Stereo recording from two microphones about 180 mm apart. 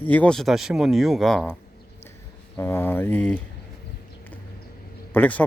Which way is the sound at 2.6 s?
10° left (ahead or behind).